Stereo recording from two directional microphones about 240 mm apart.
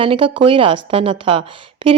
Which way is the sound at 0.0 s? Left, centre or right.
Right.